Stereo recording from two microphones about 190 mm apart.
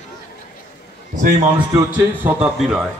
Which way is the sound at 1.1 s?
40° right (ahead or behind).